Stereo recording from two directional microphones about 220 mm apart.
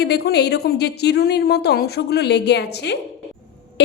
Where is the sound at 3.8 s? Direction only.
50° left (ahead or behind).